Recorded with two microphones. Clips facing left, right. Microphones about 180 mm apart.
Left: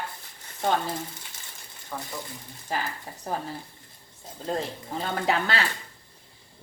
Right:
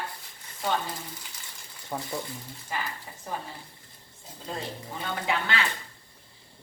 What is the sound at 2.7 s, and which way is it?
Speech, 40° left (ahead or behind).